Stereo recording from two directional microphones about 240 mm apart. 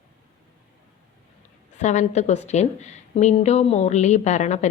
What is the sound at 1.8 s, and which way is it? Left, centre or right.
A woman's voice, left.